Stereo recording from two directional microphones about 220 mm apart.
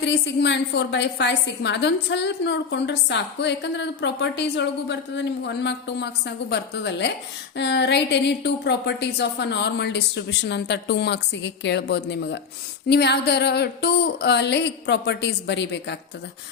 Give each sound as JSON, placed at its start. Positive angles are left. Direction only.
{"t": 0.0, "sound": "a woman's voice", "side_deg": 50}